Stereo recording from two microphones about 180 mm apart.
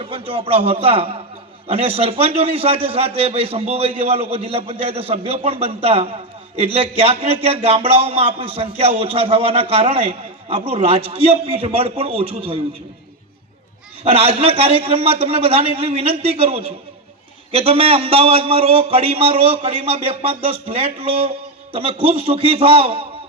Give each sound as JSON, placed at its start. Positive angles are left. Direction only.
{"t": 0.0, "sound": "speech", "side_deg": -30}
{"t": 14.0, "sound": "speech", "side_deg": -35}